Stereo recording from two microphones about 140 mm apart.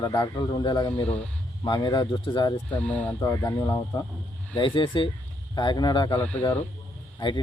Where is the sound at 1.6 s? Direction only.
30° left (ahead or behind).